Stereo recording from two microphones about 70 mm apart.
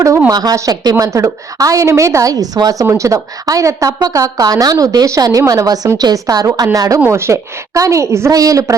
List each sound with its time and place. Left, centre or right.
0.3 s a woman's voice: right
2.8 s a woman's voice: right
8.3 s a woman's voice: right